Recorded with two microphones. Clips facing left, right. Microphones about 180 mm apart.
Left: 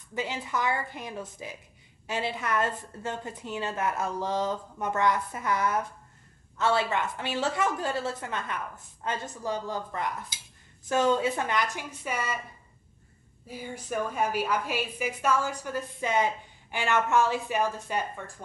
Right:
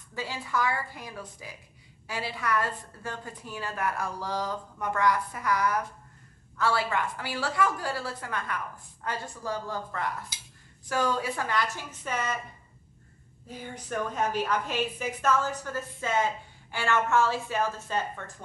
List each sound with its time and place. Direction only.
0.1 s a woman's voice: 20° left (ahead or behind)
13.5 s a woman's voice: 10° left (ahead or behind)